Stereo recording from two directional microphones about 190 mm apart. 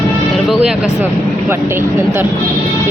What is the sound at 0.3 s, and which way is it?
Speech, centre (ahead or behind).